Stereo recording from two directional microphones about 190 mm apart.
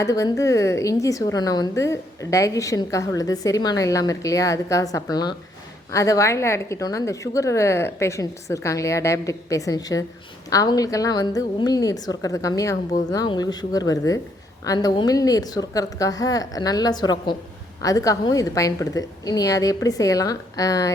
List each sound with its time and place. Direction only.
0.0 s a woman's voice: 15° left (ahead or behind)